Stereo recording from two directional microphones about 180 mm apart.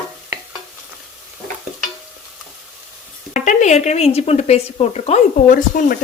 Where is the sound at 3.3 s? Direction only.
45° left (ahead or behind).